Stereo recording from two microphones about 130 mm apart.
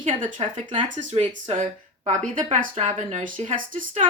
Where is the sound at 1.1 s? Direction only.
55° right (ahead or behind).